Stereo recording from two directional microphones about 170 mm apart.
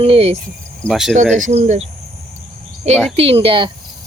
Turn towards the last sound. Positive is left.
turn(degrees=-30)  # may be behind; listen again after turning